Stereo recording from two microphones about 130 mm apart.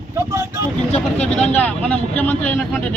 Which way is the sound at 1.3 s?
10° left (ahead or behind).